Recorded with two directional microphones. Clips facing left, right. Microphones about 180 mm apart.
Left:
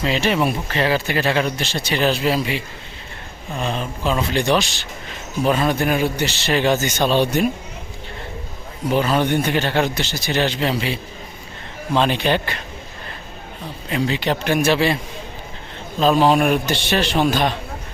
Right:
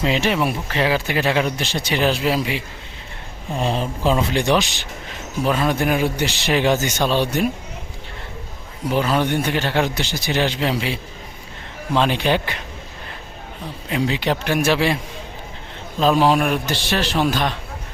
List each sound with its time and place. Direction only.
0.0 s speech: 15° right (ahead or behind)
0.3 s speech: 5° right (ahead or behind)
3.5 s speech: 30° right (ahead or behind)
4.4 s speech: 15° right (ahead or behind)
5.4 s speech: 5° right (ahead or behind)
7.0 s speech: 20° left (ahead or behind)
8.9 s speech: 5° right (ahead or behind)
11.9 s a man's voice: 5° right (ahead or behind)
13.9 s speech: 10° right (ahead or behind)
16.0 s a man's voice: 5° right (ahead or behind)